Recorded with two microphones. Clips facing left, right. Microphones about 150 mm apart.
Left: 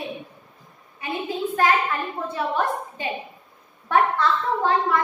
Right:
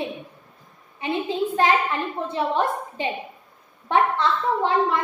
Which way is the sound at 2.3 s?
25° right (ahead or behind).